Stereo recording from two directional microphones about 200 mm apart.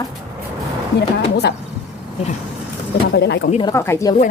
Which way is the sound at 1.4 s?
55° left (ahead or behind).